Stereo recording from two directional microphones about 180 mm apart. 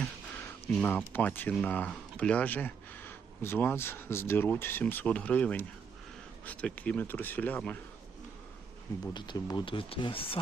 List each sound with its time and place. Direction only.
0.8 s speech: 10° left (ahead or behind)
9.1 s speech: 25° left (ahead or behind)